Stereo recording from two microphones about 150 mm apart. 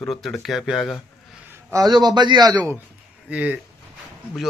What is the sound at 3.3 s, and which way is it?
Speech, 10° right (ahead or behind).